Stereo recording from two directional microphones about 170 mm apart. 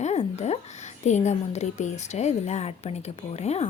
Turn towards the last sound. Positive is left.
turn(degrees=40)  # may be behind; listen again after turning